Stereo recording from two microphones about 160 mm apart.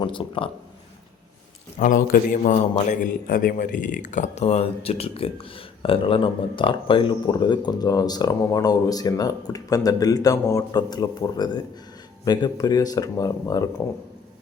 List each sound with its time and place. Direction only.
0.0 s speech: 30° left (ahead or behind)
1.8 s a man's voice: 55° left (ahead or behind); by 13.8 s 20° left (ahead or behind)